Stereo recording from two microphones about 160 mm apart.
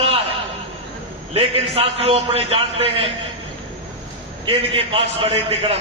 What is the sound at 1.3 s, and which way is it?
A man's voice, 40° right (ahead or behind).